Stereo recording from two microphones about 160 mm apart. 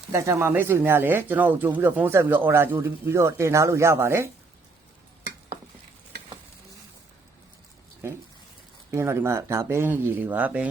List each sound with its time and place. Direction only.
0.1 s speech: 20° right (ahead or behind)
8.9 s speech: 15° right (ahead or behind)